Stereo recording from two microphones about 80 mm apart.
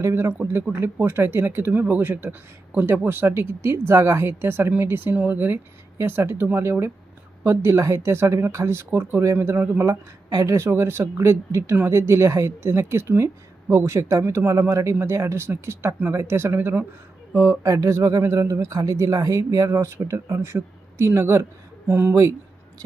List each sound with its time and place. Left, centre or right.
0.0 s speech: right
17.3 s speech: right